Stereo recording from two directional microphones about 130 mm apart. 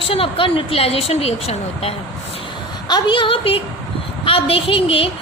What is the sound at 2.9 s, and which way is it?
A woman's voice, 40° left (ahead or behind).